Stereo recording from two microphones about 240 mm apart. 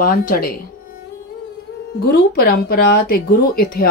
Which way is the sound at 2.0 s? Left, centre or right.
Left.